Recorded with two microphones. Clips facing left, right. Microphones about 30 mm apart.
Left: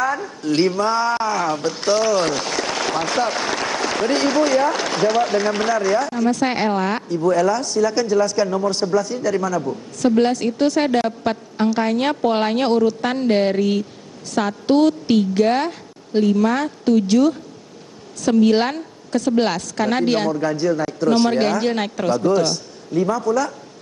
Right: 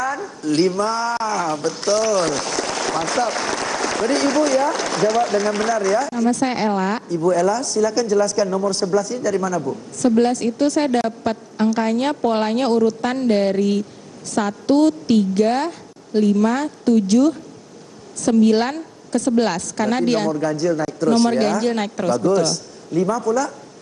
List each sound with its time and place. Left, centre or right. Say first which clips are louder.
0.0 s a woman's voice: left 2 dB; centre